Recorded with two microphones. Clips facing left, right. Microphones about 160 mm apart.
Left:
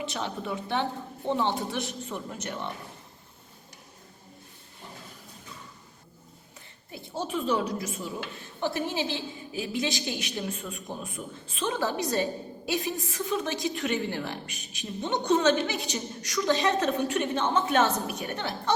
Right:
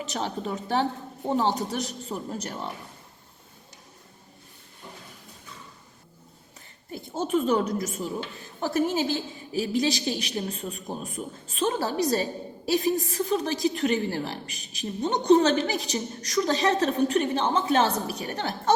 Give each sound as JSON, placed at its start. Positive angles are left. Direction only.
{"t": 0.0, "sound": "a woman's voice", "side_deg": -40}
{"t": 7.2, "sound": "a woman's voice", "side_deg": -45}